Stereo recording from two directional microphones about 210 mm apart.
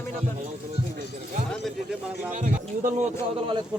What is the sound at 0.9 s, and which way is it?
Music, 40° right (ahead or behind).